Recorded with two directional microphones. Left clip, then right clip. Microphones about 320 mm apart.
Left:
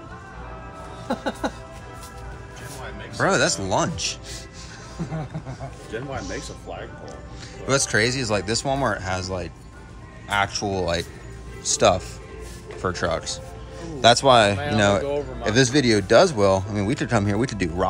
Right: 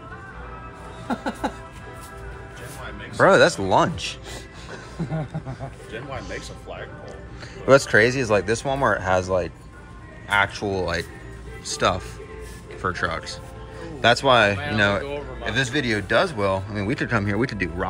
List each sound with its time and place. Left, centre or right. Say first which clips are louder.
1.0 s speech: even; centre
3.2 s speech: right 5 dB; centre
5.9 s speech: left 3 dB; left
7.6 s speech: right 5 dB; centre
10.3 s speech: right 2 dB; centre